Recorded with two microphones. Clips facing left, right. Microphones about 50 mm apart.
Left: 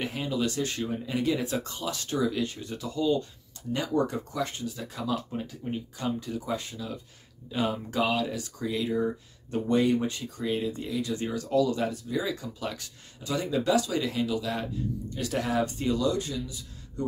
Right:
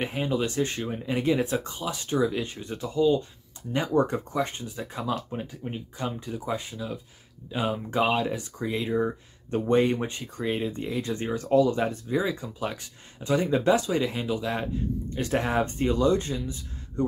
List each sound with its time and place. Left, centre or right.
0.0 s speech: right
7.9 s speech: right